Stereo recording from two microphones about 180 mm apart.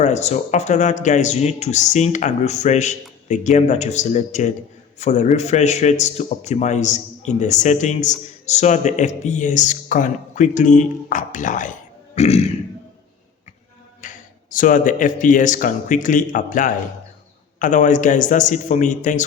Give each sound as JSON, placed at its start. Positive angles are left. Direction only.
{"t": 0.0, "sound": "a man's voice", "side_deg": 40}
{"t": 12.1, "sound": "grunt", "side_deg": 35}
{"t": 14.0, "sound": "a sound", "side_deg": 45}
{"t": 14.5, "sound": "speech", "side_deg": 45}